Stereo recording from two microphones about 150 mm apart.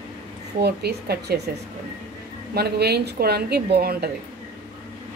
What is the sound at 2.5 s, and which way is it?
A woman's voice, 90° right.